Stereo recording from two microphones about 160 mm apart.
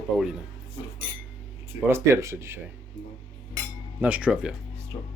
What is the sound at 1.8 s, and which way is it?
Speech, 15° right (ahead or behind).